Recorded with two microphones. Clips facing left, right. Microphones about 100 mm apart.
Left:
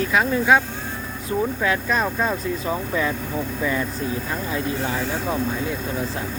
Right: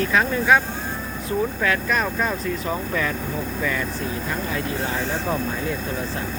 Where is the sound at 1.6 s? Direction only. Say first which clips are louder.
Left 1 dB; 20° left (ahead or behind).